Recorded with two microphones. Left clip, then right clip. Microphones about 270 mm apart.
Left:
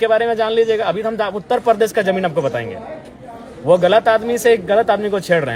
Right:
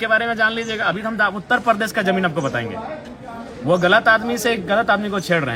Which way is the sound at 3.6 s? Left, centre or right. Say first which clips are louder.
Left 2 dB; centre.